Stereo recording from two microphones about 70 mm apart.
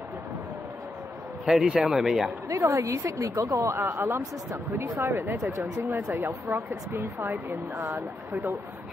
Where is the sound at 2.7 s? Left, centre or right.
Right.